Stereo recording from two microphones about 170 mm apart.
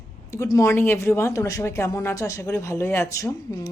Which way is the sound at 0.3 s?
20° left (ahead or behind).